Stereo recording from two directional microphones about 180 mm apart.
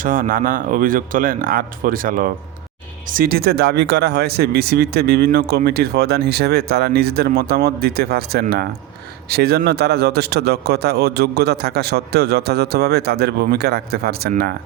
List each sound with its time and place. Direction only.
0.0 s speech: 50° right (ahead or behind)